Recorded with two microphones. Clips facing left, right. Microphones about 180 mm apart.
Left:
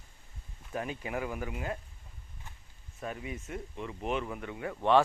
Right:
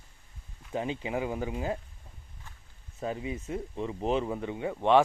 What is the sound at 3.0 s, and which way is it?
Speech, 25° right (ahead or behind).